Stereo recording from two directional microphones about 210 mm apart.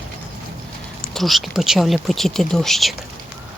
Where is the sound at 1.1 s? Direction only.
Centre (ahead or behind).